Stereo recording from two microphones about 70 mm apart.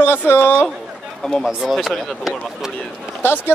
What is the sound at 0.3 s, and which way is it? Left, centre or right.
Speech, left.